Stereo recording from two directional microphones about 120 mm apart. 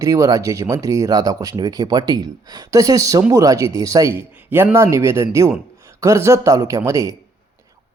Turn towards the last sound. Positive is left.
turn(degrees=-25)  # may be behind; listen again after turning